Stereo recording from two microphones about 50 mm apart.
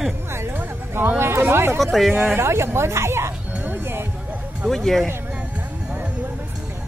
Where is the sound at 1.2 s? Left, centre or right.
Right.